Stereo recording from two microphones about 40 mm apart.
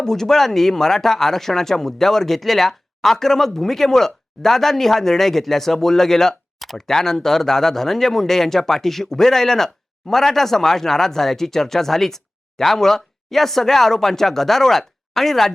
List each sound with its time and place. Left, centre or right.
0.0 s speech: centre